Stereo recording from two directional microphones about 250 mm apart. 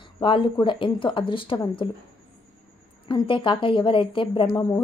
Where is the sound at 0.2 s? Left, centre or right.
Centre.